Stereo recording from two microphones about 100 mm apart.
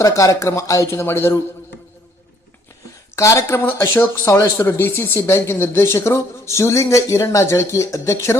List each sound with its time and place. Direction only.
0.0 s speech: 30° left (ahead or behind)
3.2 s speech: 30° left (ahead or behind)